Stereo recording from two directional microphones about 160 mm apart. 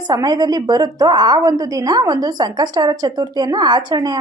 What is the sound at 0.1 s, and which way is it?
A woman's voice, 25° right (ahead or behind).